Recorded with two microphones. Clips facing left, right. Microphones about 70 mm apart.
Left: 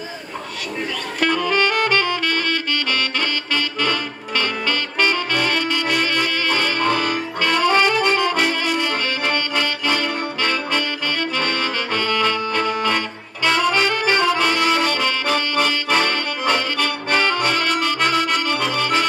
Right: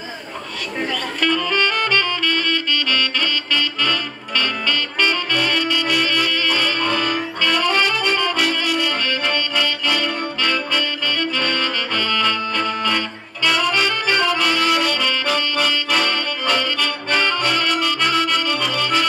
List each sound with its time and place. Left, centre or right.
1.2 s saxophone: left